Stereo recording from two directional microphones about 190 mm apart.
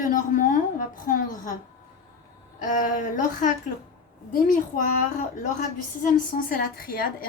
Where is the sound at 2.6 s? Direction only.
45° left (ahead or behind).